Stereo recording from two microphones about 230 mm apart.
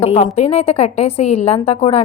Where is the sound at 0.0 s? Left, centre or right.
Left.